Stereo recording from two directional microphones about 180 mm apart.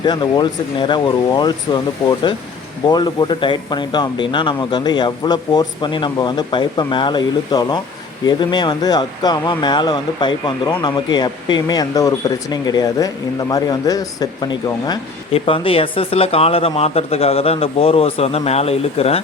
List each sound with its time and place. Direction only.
0.0 s speech: 25° left (ahead or behind)